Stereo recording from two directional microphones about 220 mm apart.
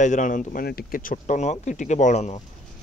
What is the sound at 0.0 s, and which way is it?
Speech, 35° left (ahead or behind).